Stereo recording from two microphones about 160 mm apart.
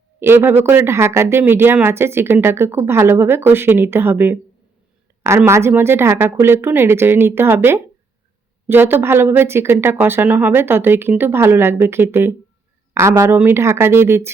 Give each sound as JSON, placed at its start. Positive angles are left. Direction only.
{"t": 0.2, "sound": "speech", "side_deg": -15}